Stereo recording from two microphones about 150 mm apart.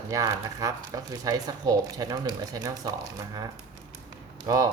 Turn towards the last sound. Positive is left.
turn(degrees=-25)  # may be behind; listen again after turning